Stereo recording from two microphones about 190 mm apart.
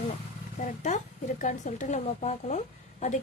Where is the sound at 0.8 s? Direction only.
40° left (ahead or behind).